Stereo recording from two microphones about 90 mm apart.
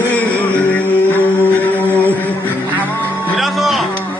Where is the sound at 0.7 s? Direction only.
20° left (ahead or behind).